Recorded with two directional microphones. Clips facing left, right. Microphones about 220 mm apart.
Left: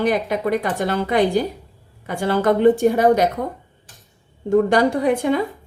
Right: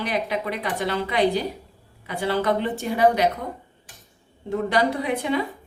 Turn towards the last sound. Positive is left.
turn(degrees=45)  # may be behind; listen again after turning